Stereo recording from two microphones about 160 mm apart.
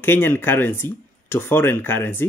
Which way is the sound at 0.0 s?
15° left (ahead or behind).